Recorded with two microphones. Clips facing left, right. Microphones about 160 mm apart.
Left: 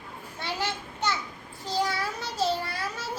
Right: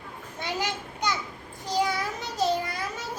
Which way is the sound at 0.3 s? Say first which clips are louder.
Right 1 dB; 15° right (ahead or behind).